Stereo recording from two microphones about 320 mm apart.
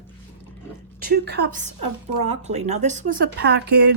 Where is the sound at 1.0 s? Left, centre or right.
Right.